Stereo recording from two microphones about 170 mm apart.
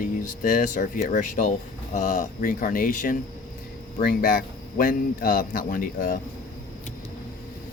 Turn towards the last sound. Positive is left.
turn(degrees=55)  # may be behind; listen again after turning